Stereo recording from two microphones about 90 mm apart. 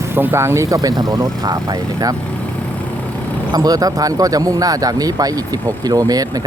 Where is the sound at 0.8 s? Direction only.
45° right (ahead or behind).